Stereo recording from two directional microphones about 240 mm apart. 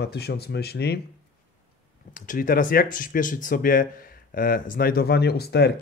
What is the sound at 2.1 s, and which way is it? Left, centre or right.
Speech, left.